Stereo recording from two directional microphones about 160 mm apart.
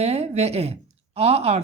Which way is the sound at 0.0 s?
40° right (ahead or behind).